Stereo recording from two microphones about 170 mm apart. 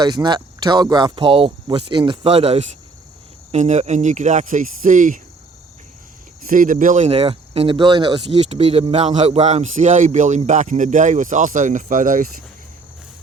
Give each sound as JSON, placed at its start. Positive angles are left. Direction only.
{"t": 0.0, "sound": "speech", "side_deg": -25}
{"t": 6.4, "sound": "speech", "side_deg": -50}